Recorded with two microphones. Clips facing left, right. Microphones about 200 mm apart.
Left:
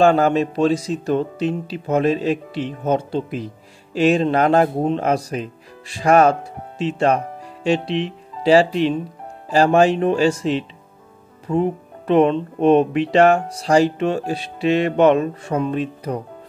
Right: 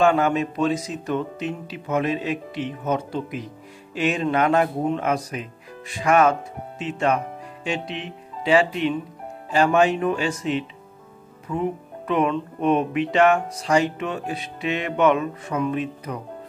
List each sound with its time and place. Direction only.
0.0 s speech: 35° left (ahead or behind)